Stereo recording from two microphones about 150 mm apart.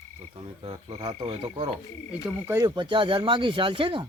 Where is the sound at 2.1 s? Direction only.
5° right (ahead or behind).